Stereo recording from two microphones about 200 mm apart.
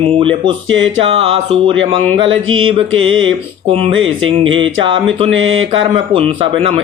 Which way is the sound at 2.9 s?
85° right.